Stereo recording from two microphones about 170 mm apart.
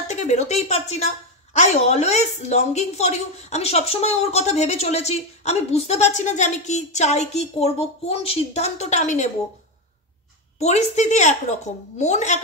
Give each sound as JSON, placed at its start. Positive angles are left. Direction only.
{"t": 0.1, "sound": "a woman's voice", "side_deg": 40}
{"t": 10.6, "sound": "a woman's voice", "side_deg": 40}